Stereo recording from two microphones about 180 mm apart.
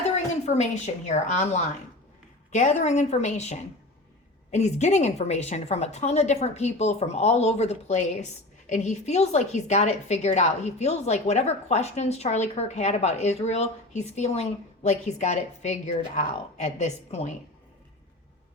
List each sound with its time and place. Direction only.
0.4 s a woman's voice: 40° left (ahead or behind)